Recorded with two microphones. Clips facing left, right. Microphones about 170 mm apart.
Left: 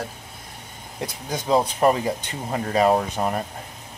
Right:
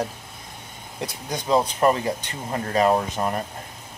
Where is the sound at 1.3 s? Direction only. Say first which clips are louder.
Left 1 dB; 5° left (ahead or behind).